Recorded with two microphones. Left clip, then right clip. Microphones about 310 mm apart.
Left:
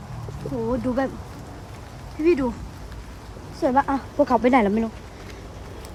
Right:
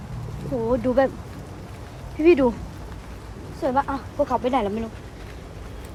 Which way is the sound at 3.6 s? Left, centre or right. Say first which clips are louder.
Left 2 dB; centre.